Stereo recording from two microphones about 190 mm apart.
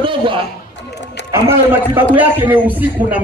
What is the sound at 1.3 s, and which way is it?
A man's voice, 15° right (ahead or behind).